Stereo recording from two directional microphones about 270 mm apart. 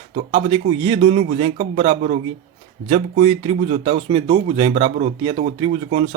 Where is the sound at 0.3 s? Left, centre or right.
Right.